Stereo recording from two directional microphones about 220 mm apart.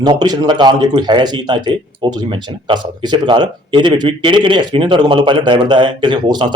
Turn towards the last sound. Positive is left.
turn(degrees=-20)  # may be behind; listen again after turning